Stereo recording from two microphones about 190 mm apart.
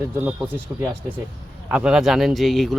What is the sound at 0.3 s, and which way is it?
Speech, 10° right (ahead or behind).